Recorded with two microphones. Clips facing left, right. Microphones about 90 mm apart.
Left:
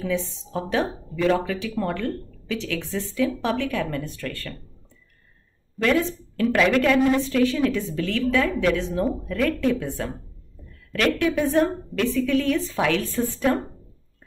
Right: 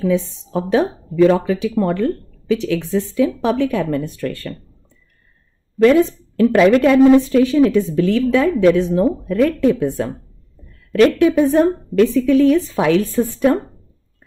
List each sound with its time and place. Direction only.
0.1 s a woman's voice: 15° right (ahead or behind)
5.8 s a woman's voice: 20° right (ahead or behind)